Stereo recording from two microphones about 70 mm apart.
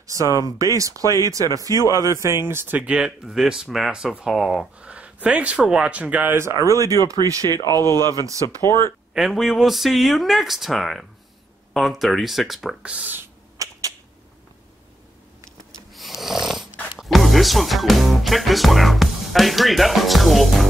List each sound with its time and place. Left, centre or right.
0.0 s speech: right
2.8 s speech: centre
4.3 s speech: centre
4.7 s speech: centre
6.3 s speech: right
6.7 s speech: right
7.8 s speech: left
9.1 s speech: centre
12.8 s speech: right
13.6 s a sound: right
15.9 s snoring: centre
17.0 s speech: centre